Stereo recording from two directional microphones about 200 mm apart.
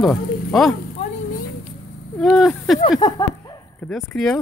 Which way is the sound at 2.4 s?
Centre (ahead or behind).